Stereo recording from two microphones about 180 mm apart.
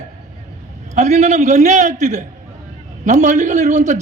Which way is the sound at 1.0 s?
40° right (ahead or behind).